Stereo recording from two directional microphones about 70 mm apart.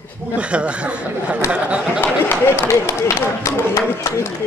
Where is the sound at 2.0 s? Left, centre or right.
Left.